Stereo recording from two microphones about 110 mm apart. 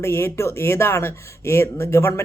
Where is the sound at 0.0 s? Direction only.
25° left (ahead or behind).